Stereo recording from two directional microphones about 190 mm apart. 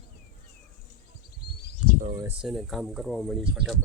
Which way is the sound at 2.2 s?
5° right (ahead or behind).